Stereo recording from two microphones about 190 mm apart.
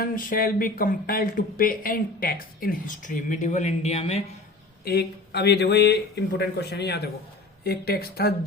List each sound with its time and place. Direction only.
0.0 s speech: 45° left (ahead or behind)
4.9 s speech: 60° left (ahead or behind)